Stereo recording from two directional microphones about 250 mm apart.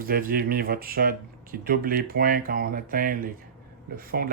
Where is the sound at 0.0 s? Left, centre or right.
Right.